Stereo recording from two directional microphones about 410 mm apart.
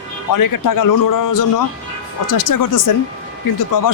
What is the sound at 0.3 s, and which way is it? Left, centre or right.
Speech, left.